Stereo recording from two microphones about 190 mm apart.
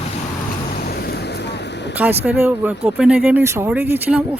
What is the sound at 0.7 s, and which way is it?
Waves, 55° left (ahead or behind).